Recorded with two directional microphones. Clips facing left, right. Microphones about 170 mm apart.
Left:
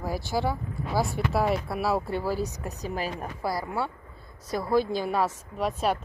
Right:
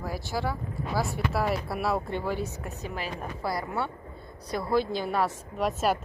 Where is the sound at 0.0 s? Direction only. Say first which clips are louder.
Left 3 dB; 30° left (ahead or behind).